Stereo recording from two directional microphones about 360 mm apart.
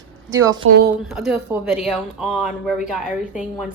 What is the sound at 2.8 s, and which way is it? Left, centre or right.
Speech, centre.